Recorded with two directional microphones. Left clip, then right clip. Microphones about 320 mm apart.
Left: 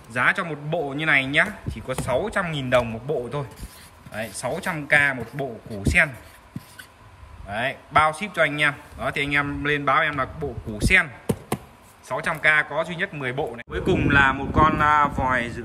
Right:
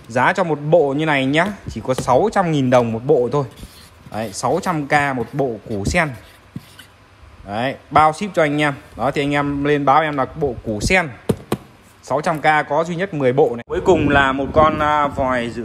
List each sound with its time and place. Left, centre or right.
0.1 s speech: centre
4.2 s speech: centre
7.5 s speech: centre
10.8 s a sound: centre
12.1 s speech: centre